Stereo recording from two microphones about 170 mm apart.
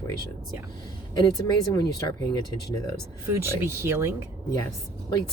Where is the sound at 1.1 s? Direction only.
20° left (ahead or behind).